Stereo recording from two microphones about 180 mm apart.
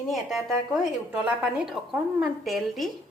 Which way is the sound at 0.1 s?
Centre (ahead or behind).